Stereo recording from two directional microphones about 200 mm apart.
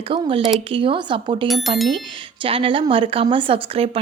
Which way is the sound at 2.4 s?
25° right (ahead or behind).